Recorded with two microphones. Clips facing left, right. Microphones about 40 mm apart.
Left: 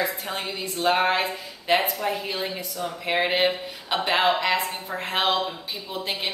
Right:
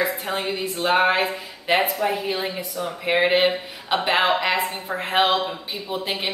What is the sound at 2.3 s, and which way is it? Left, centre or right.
Speech, right.